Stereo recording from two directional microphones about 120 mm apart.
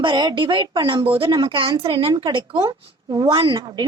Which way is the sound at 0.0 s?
40° right (ahead or behind).